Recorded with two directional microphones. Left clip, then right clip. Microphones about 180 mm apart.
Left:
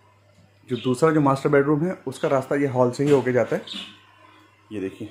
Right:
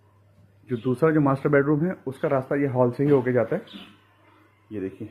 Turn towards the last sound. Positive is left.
turn(degrees=20)  # may be behind; listen again after turning